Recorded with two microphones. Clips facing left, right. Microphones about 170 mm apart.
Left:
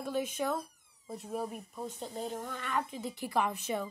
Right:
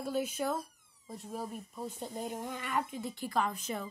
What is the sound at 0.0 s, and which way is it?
Speech, 5° right (ahead or behind).